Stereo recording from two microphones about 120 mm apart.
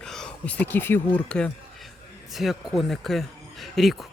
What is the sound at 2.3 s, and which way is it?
Speech, centre (ahead or behind).